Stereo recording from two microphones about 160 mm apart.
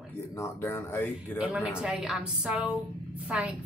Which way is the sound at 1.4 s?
5° right (ahead or behind).